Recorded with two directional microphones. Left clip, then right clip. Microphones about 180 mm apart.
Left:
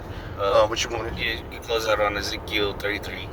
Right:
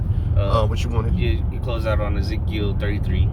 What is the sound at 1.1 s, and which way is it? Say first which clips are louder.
Speech: left 2 dB; 20° left (ahead or behind).